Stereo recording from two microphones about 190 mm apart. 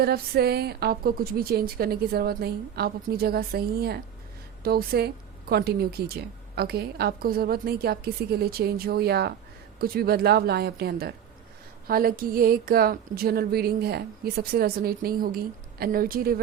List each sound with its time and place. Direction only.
0.0 s a woman's voice: 55° right (ahead or behind)